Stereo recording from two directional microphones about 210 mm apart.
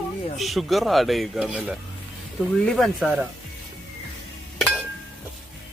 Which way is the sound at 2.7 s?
Centre (ahead or behind).